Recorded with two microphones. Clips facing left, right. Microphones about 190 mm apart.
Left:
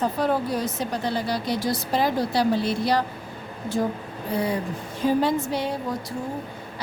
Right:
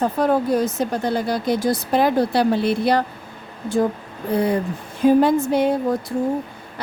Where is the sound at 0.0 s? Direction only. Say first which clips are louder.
Right 5 dB; 50° right (ahead or behind).